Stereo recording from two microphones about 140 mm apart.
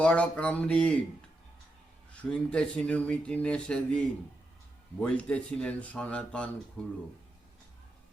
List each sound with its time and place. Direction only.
0.0 s speech: 10° left (ahead or behind)
2.3 s speech: 5° left (ahead or behind)
5.0 s speech: 10° left (ahead or behind)